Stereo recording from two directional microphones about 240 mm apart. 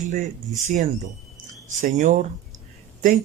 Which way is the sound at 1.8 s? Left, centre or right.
Right.